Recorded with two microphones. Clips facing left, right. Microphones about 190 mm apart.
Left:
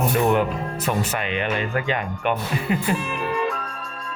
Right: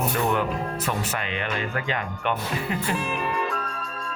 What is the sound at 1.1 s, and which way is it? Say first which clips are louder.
Speech: left 4 dB; 20° left (ahead or behind).